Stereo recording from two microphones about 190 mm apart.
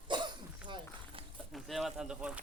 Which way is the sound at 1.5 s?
Centre (ahead or behind).